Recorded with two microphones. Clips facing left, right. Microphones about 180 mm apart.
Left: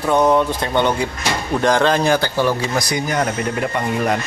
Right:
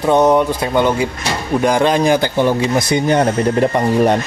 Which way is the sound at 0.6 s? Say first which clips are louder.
Right 3 dB; 5° right (ahead or behind).